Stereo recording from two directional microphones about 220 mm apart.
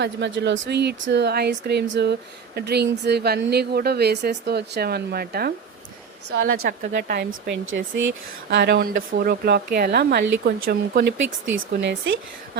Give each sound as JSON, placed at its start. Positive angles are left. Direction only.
{"t": 0.0, "sound": "a woman's voice", "side_deg": -50}